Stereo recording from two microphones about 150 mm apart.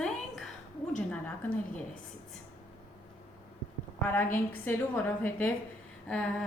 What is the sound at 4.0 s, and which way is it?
A woman's voice, 15° left (ahead or behind).